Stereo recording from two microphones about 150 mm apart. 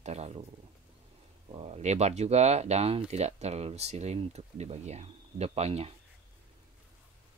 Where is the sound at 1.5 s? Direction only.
45° right (ahead or behind).